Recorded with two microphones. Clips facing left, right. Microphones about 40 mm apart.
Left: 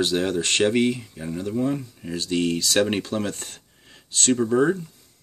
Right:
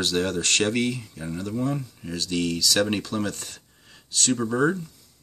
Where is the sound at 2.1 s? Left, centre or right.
Left.